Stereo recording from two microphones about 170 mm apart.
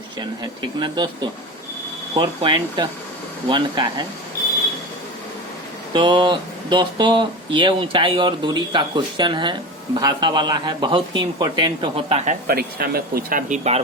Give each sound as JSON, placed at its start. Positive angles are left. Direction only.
{"t": 0.2, "sound": "speech", "side_deg": -25}
{"t": 5.9, "sound": "speech", "side_deg": -30}
{"t": 12.5, "sound": "speech", "side_deg": -65}